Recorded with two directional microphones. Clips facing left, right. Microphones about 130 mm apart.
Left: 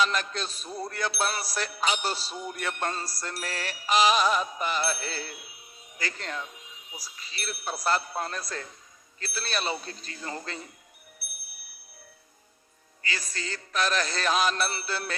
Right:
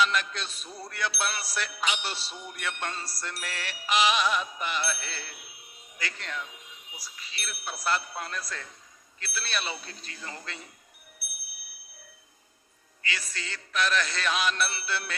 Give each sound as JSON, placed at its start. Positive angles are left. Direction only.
{"t": 0.0, "sound": "music", "side_deg": 40}
{"t": 13.0, "sound": "music", "side_deg": 40}